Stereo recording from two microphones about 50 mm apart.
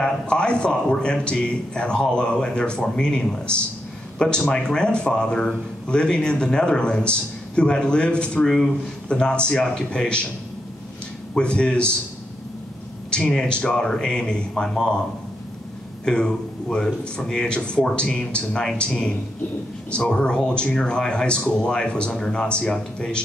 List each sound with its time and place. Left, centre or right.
0.0 s a man's voice: centre
11.3 s a man's voice: left
13.1 s a man's voice: centre
16.1 s a man's voice: centre